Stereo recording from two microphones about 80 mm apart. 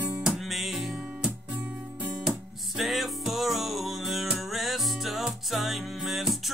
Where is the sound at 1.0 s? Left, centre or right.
Centre.